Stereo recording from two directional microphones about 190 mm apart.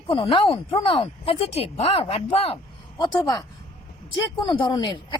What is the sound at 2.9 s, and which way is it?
Speech, 20° left (ahead or behind).